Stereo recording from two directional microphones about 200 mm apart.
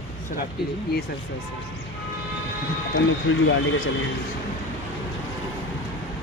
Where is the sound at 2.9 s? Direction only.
70° left (ahead or behind).